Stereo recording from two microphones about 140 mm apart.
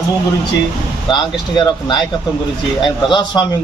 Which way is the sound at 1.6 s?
35° left (ahead or behind).